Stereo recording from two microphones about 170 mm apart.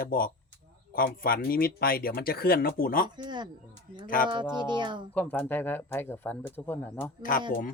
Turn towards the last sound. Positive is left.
turn(degrees=50)  # may be behind; listen again after turning